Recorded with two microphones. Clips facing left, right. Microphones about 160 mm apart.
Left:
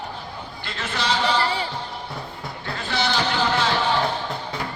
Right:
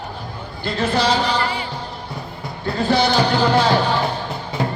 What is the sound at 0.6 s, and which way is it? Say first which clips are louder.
Speech: right 10 dB; 35° right (ahead or behind).